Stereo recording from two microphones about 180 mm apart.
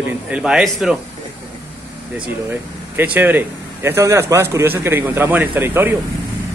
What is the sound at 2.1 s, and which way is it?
Speech, 10° right (ahead or behind).